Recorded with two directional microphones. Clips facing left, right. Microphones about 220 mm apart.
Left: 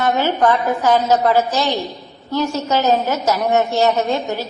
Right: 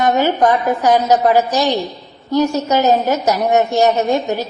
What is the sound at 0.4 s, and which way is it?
A man's voice, 15° right (ahead or behind).